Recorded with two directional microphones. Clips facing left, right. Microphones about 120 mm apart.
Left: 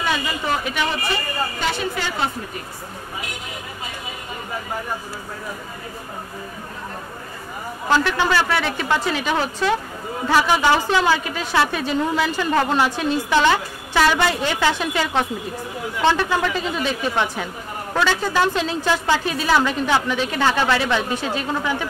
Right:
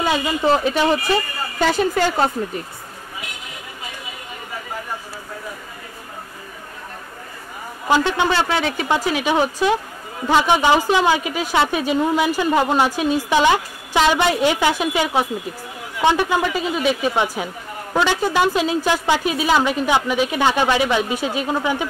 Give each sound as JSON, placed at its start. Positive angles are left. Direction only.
{"t": 0.0, "sound": "speech", "side_deg": -30}
{"t": 1.6, "sound": "a woman's voice", "side_deg": -45}
{"t": 7.9, "sound": "a woman's voice", "side_deg": -20}